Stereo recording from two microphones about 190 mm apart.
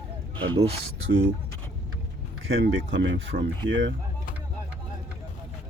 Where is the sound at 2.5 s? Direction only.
75° right (ahead or behind).